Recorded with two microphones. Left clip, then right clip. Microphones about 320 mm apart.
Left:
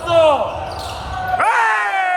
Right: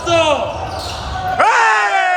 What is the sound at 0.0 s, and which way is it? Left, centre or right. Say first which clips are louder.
Basketball bounce: left 1 dB; centre.